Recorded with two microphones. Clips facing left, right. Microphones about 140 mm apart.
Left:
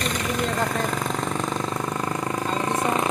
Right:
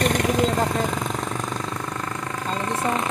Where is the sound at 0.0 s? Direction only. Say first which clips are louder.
Right 6 dB; 55° right (ahead or behind).